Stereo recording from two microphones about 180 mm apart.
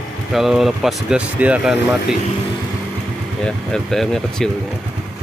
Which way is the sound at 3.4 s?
5° left (ahead or behind).